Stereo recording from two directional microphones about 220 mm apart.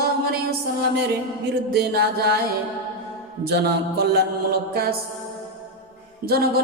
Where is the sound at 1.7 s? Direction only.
45° right (ahead or behind).